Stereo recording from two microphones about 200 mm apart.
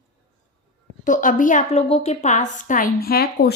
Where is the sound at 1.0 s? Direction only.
40° left (ahead or behind).